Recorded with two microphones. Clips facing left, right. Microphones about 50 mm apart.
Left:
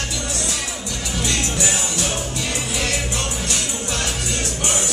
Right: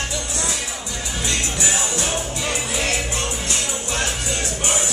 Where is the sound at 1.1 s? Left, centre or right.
Right.